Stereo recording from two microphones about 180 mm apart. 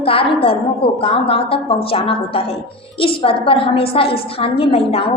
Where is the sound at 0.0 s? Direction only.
30° left (ahead or behind).